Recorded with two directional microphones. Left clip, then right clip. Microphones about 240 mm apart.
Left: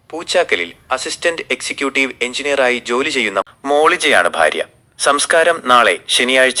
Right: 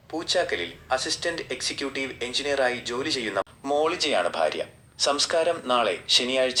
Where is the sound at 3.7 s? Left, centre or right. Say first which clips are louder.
Left 12 dB; left.